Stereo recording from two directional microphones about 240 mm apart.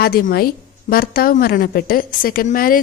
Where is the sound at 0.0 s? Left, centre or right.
Left.